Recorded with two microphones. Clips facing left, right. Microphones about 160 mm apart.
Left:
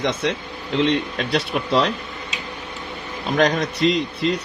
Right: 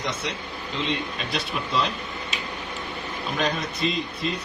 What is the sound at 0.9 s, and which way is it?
Speech, 70° left (ahead or behind).